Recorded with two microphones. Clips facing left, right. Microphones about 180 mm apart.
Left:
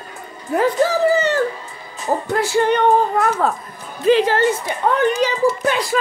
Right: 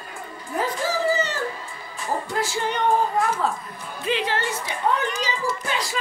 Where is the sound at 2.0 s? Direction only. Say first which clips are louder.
Left 6 dB; 65° left (ahead or behind).